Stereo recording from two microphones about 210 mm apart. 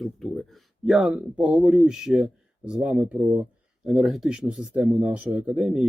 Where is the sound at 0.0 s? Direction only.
Centre (ahead or behind).